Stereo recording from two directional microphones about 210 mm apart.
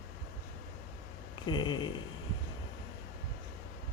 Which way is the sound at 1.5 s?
20° left (ahead or behind).